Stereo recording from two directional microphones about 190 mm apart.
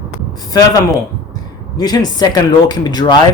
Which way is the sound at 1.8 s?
20° left (ahead or behind).